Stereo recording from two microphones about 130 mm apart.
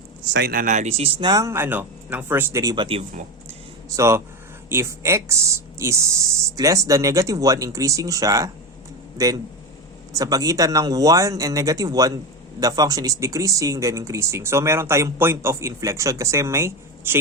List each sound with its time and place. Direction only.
0.5 s speech: 85° right; by 1.1 s 55° right (ahead or behind)
1.2 s speech: 30° right (ahead or behind)
2.7 s speech: 45° right (ahead or behind)
3.8 s speech: 20° right (ahead or behind)